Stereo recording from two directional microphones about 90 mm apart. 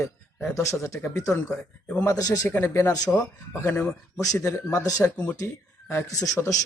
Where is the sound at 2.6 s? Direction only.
30° left (ahead or behind).